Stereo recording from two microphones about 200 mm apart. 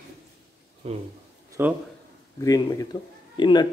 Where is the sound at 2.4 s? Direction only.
20° left (ahead or behind).